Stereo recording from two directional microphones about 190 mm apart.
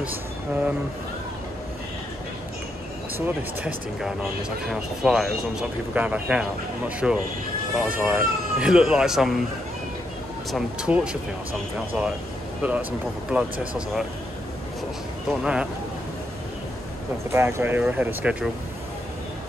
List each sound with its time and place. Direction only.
0.0 s speech: 10° right (ahead or behind)
3.2 s speech: 5° right (ahead or behind)
10.5 s speech: 5° right (ahead or behind)
13.3 s speech: 5° right (ahead or behind)
15.4 s speech: 5° right (ahead or behind)
17.3 s speech: 10° right (ahead or behind)